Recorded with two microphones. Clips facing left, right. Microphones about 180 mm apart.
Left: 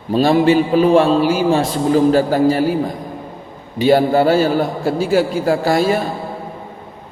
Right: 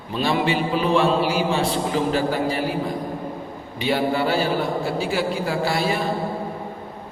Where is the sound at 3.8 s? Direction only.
40° left (ahead or behind).